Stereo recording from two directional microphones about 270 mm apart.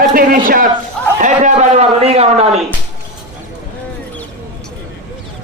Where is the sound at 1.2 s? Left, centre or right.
Right.